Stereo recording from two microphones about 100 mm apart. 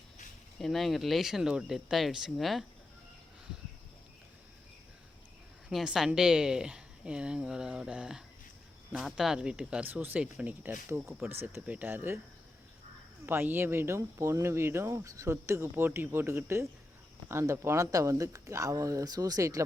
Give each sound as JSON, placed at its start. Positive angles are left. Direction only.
{"t": 0.6, "sound": "speech", "side_deg": 0}
{"t": 5.6, "sound": "a woman's voice", "side_deg": -5}
{"t": 13.2, "sound": "speech", "side_deg": -20}